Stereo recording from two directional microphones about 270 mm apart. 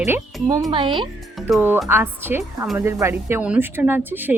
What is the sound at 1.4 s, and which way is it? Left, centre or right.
Speech, centre.